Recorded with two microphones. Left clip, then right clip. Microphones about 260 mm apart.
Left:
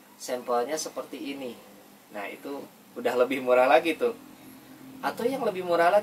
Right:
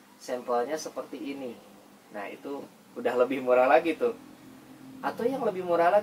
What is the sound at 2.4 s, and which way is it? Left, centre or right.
Speech, centre.